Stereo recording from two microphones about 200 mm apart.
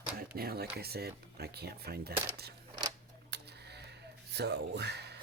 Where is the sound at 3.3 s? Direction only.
55° right (ahead or behind).